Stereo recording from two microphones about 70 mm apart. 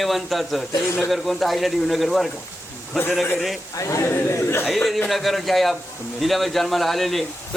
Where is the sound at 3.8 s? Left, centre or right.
Left.